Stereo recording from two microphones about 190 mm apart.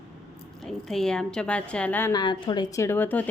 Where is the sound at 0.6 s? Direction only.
5° left (ahead or behind).